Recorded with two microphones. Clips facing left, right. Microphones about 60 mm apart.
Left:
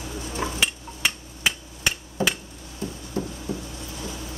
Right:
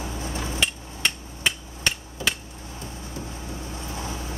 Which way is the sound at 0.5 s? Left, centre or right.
Centre.